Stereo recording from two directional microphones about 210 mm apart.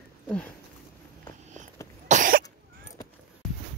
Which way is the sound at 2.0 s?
40° right (ahead or behind).